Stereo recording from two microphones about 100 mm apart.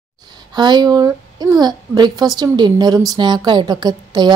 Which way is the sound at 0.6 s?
45° right (ahead or behind).